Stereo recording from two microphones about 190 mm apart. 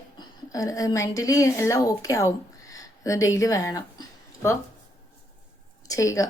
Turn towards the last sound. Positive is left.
turn(degrees=15)  # may be behind; listen again after turning